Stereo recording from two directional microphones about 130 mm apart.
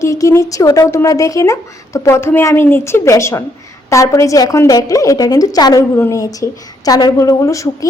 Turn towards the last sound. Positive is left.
turn(degrees=25)  # may be behind; listen again after turning